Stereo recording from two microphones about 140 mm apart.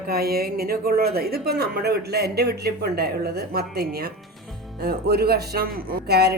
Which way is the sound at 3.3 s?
90° right.